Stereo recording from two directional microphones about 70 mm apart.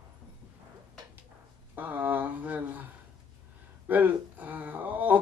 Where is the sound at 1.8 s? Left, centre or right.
Right.